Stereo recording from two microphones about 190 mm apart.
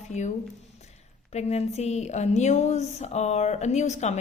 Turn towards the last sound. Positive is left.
turn(degrees=35)  # may be behind; listen again after turning